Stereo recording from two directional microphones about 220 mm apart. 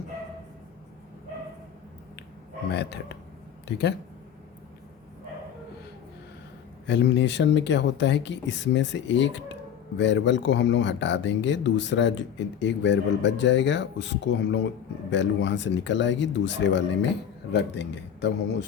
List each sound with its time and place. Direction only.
2.7 s speech: 50° left (ahead or behind)
6.8 s speech: 50° left (ahead or behind)